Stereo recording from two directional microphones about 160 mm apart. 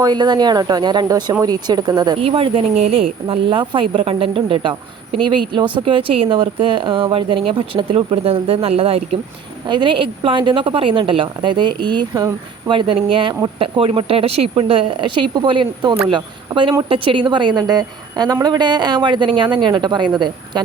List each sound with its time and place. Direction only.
0.0 s a woman's voice: 25° right (ahead or behind)
2.1 s a woman's voice: 35° right (ahead or behind)